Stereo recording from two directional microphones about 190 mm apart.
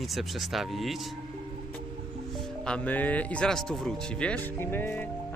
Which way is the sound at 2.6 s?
5° left (ahead or behind).